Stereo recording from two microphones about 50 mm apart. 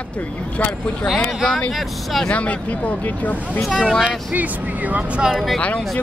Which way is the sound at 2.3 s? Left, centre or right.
Left.